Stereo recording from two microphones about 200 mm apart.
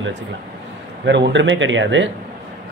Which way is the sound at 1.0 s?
60° right (ahead or behind).